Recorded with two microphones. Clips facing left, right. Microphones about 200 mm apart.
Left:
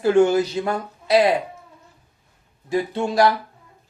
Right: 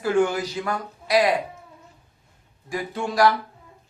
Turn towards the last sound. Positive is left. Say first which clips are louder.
# left 3 dB
turn(degrees=25)  # may be behind; listen again after turning